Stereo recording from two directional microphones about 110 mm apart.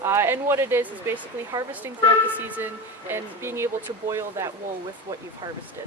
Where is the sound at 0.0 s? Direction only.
25° right (ahead or behind).